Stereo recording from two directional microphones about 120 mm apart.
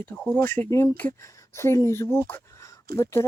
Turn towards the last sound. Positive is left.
turn(degrees=25)  # may be behind; listen again after turning